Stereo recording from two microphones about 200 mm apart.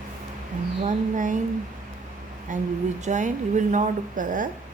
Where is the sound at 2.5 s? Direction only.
40° right (ahead or behind).